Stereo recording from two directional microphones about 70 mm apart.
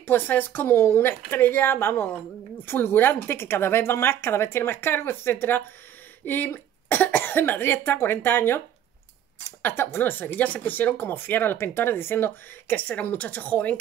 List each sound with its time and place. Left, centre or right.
0.0 s speech: left